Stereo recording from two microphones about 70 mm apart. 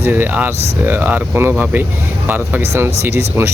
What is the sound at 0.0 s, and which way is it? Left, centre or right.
Speech, right.